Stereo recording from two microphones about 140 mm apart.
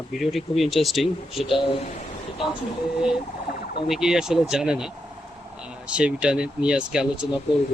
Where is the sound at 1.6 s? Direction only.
50° left (ahead or behind).